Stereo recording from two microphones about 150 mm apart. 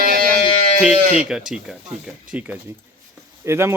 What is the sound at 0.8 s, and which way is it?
Speech, 45° left (ahead or behind).